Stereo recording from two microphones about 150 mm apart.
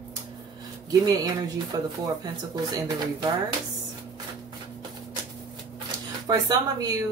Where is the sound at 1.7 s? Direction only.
25° right (ahead or behind).